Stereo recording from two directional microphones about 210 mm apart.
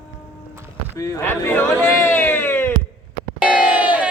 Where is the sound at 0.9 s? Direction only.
15° left (ahead or behind).